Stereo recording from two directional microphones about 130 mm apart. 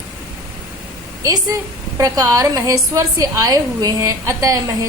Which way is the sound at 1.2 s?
30° right (ahead or behind).